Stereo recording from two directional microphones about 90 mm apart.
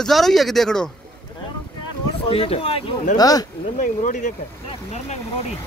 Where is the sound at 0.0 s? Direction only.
5° left (ahead or behind).